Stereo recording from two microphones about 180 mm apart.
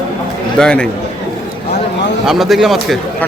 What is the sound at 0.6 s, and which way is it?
Speech, 5° left (ahead or behind).